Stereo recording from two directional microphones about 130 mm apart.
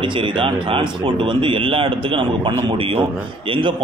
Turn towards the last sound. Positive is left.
turn(degrees=-40)  # may be behind; listen again after turning